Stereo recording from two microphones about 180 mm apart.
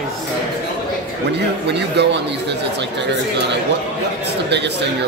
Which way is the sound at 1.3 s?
70° right (ahead or behind).